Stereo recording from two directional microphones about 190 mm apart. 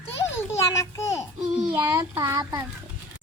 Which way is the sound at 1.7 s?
20° right (ahead or behind).